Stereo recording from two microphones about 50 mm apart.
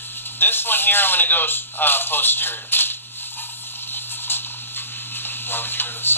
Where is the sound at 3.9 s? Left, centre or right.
Left.